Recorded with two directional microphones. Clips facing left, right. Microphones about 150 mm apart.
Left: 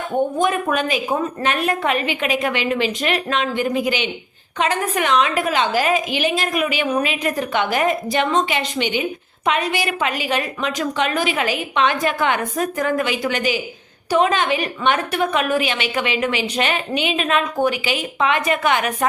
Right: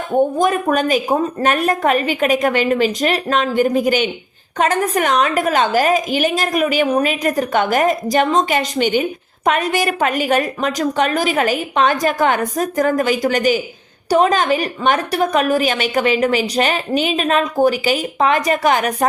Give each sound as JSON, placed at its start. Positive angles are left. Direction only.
{"t": 0.3, "sound": "a woman's voice", "side_deg": -40}